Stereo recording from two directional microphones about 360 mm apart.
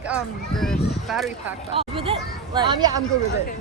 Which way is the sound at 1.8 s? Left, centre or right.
Centre.